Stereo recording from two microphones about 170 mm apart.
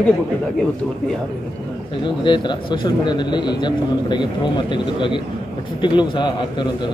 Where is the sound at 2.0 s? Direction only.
30° left (ahead or behind).